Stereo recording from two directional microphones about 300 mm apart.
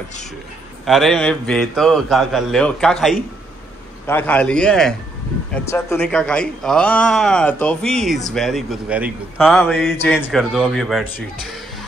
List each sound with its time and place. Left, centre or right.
0.8 s speech: centre